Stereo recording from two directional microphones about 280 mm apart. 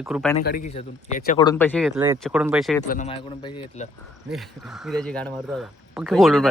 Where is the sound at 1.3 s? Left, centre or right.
Centre.